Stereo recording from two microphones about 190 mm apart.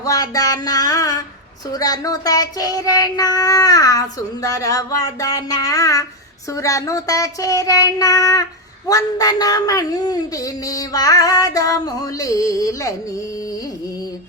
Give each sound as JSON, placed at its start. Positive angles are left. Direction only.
{"t": 0.0, "sound": "a sound", "side_deg": 20}
{"t": 1.7, "sound": "speech", "side_deg": 20}
{"t": 4.4, "sound": "child singing", "side_deg": 15}
{"t": 8.9, "sound": "speech", "side_deg": 20}